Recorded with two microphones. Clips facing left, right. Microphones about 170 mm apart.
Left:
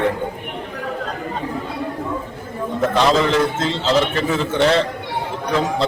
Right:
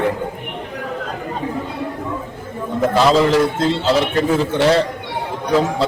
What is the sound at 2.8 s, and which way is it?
A man's voice, 5° right (ahead or behind).